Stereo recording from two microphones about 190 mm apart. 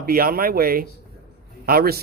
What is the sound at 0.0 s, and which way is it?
Speech, 50° right (ahead or behind).